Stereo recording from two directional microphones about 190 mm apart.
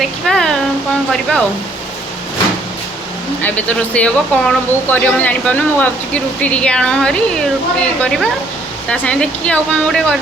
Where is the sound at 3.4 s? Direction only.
10° left (ahead or behind).